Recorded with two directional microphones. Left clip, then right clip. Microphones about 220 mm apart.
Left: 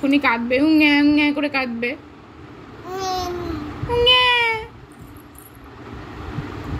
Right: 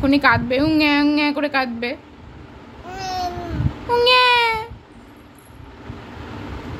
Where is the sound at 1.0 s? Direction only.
90° right.